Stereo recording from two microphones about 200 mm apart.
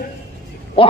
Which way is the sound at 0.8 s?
25° left (ahead or behind).